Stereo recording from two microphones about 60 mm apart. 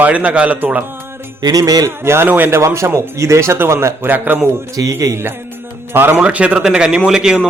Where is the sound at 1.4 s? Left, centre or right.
Right.